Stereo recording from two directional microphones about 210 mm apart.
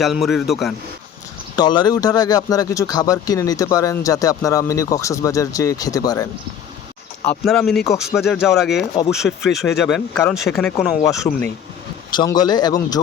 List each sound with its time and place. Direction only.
0.0 s speech: centre (ahead or behind)
1.5 s speech: 20° left (ahead or behind)
7.3 s speech: 5° left (ahead or behind)
11.3 s speech: 20° left (ahead or behind)